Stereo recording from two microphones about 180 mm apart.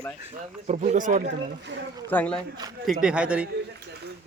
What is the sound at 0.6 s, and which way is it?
Speech, 40° right (ahead or behind).